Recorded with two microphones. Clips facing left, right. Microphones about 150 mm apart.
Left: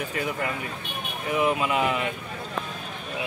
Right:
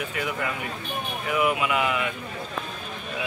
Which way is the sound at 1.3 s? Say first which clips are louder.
Even; 30° left (ahead or behind).